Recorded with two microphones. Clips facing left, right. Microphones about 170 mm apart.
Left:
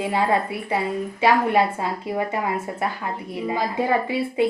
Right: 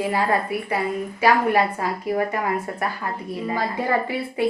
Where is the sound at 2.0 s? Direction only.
20° left (ahead or behind).